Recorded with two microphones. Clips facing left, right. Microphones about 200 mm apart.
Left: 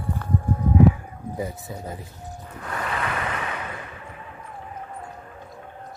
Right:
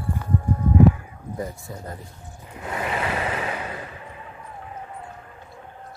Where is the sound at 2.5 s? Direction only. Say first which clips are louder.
Right 2 dB; 25° right (ahead or behind).